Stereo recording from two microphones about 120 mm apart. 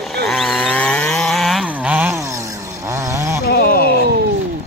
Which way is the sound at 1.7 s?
10° right (ahead or behind).